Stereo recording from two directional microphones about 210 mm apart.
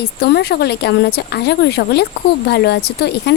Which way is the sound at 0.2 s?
50° left (ahead or behind).